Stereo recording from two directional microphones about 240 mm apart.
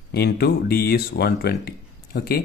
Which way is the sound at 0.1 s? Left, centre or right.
Left.